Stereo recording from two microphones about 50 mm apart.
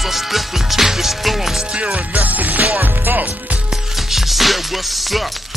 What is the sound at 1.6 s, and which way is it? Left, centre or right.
Music, right.